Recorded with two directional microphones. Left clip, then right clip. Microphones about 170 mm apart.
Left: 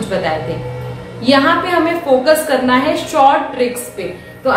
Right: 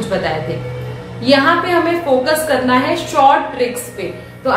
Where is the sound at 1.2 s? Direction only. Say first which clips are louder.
Even; 15° left (ahead or behind).